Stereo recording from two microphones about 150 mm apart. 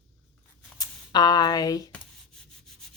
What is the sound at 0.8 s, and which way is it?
Speech, 25° left (ahead or behind).